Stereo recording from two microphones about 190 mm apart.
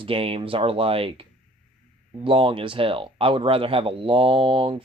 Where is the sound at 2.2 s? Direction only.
30° right (ahead or behind).